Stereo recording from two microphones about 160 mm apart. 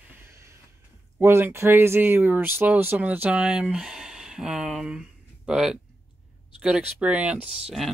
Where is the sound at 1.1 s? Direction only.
15° right (ahead or behind).